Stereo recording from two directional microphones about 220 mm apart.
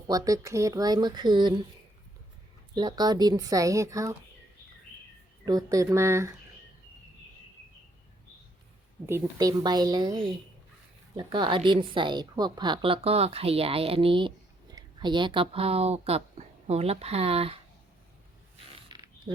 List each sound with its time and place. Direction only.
0.1 s speech: 15° right (ahead or behind)
2.7 s speech: 20° right (ahead or behind)
5.5 s speech: 15° right (ahead or behind)
9.0 s a woman's voice: 15° right (ahead or behind)
18.9 s zipper: 20° right (ahead or behind)